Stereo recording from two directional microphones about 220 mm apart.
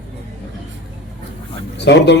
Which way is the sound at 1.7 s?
50° left (ahead or behind).